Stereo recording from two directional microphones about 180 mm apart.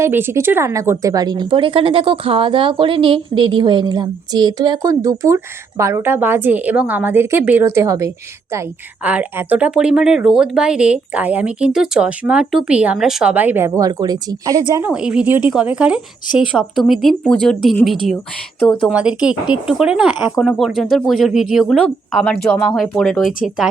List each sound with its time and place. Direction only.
0.0 s a woman's voice: 10° right (ahead or behind)
14.9 s speech: 5° right (ahead or behind)